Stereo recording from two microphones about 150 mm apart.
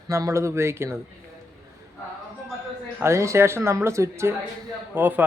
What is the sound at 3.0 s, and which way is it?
A man's voice, 20° right (ahead or behind).